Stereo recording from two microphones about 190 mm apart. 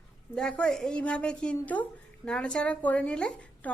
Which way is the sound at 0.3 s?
5° left (ahead or behind).